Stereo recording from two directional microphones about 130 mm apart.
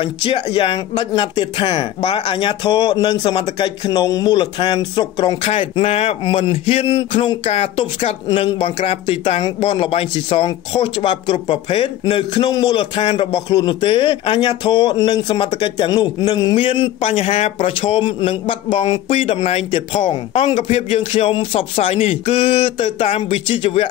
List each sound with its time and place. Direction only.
0.0 s speech: 40° left (ahead or behind)
16.5 s speech: 40° left (ahead or behind)